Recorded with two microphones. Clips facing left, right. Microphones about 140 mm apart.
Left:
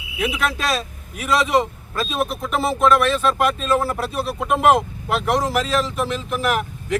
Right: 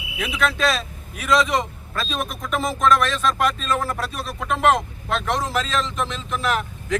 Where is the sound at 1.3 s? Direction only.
5° left (ahead or behind).